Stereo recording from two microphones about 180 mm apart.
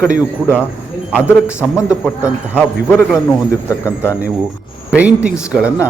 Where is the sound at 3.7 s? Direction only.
15° left (ahead or behind).